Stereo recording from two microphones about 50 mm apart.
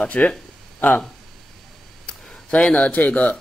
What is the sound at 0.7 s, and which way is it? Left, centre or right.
Speech, left.